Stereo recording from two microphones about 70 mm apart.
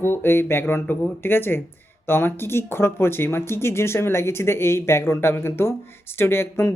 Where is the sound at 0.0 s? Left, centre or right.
Left.